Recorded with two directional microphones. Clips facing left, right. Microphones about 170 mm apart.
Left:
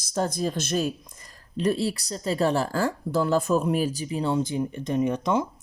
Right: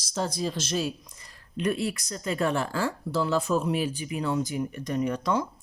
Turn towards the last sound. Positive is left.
turn(degrees=20)  # may be behind; listen again after turning